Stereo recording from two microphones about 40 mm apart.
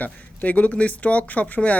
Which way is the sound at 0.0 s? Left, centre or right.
Left.